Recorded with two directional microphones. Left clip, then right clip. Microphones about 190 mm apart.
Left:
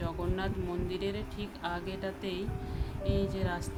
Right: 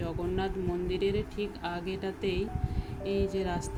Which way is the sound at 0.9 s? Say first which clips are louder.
Right 5 dB; 5° right (ahead or behind).